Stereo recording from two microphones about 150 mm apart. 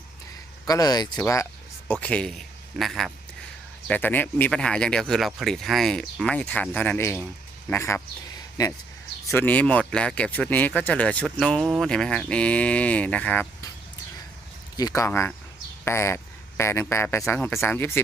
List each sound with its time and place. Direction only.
0.6 s speech: 25° left (ahead or behind)
1.9 s speech: 10° left (ahead or behind)
3.8 s speech: 10° left (ahead or behind)
9.2 s speech: 15° left (ahead or behind)
14.8 s speech: 25° left (ahead or behind)